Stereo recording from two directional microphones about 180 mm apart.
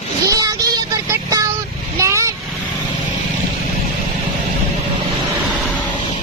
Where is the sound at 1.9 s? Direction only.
15° right (ahead or behind).